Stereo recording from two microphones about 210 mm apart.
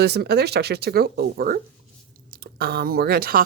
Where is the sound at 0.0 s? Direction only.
50° right (ahead or behind).